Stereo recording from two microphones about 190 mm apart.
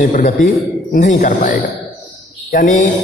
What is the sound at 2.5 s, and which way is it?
Speech, 45° left (ahead or behind).